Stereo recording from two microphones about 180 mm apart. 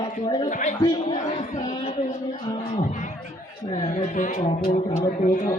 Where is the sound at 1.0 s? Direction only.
40° left (ahead or behind).